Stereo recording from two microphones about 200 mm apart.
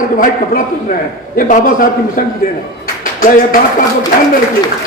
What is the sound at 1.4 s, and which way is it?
Speech, 45° left (ahead or behind).